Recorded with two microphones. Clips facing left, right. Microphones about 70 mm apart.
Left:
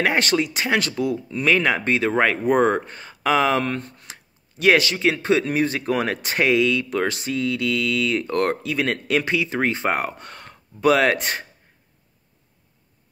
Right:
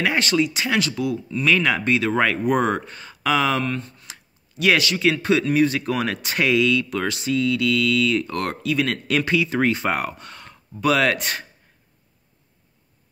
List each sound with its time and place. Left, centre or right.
0.0 s speech: left
9.0 s speech: left
10.1 s speech: left